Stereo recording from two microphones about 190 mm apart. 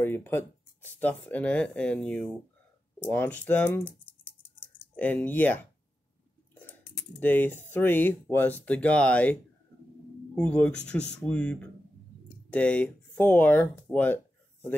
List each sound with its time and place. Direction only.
0.0 s speech: 10° left (ahead or behind)
4.2 s typing: 10° left (ahead or behind)
6.5 s chewing: 10° left (ahead or behind)
7.2 s speech: 10° left (ahead or behind)
13.9 s a sound: 10° left (ahead or behind)